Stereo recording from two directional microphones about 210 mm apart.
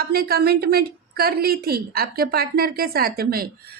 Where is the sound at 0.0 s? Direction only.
45° right (ahead or behind).